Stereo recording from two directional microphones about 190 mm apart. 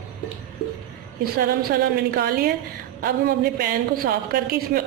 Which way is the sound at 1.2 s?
55° right (ahead or behind).